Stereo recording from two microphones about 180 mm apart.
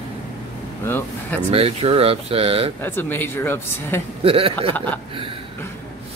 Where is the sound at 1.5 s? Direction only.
35° right (ahead or behind).